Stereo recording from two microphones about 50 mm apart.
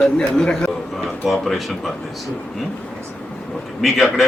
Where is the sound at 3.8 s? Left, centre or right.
Centre.